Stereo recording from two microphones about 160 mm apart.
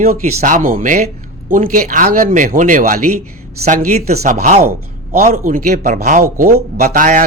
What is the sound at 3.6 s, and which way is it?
Speech, 45° right (ahead or behind).